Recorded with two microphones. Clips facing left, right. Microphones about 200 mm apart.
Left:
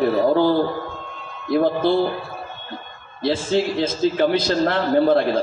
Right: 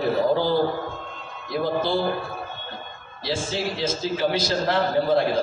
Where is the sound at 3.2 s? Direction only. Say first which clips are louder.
Left 7 dB; 55° left (ahead or behind).